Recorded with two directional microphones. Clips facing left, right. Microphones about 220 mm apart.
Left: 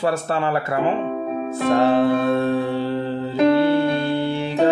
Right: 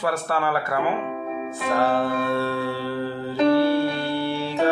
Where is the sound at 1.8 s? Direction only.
20° left (ahead or behind).